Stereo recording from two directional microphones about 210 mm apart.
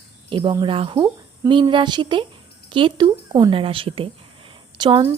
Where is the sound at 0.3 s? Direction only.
25° right (ahead or behind).